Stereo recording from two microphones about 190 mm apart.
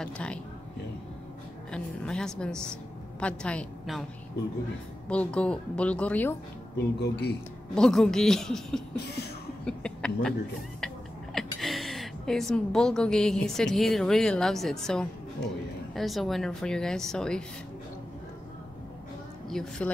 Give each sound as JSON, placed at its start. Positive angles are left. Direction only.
{"t": 0.0, "sound": "speech", "side_deg": 5}
{"t": 1.7, "sound": "a woman's voice", "side_deg": 5}
{"t": 5.1, "sound": "speech", "side_deg": 5}
{"t": 7.0, "sound": "speech", "side_deg": 60}
{"t": 7.7, "sound": "speech", "side_deg": 5}
{"t": 11.3, "sound": "a woman's voice", "side_deg": 0}
{"t": 19.5, "sound": "speech", "side_deg": 0}